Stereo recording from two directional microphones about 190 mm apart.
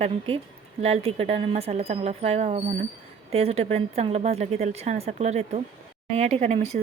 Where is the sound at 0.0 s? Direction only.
30° right (ahead or behind).